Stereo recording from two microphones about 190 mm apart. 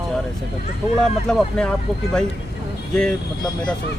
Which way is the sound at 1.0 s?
5° left (ahead or behind).